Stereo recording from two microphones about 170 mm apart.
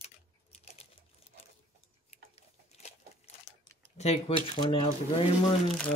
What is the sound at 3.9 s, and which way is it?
Speech, 40° left (ahead or behind).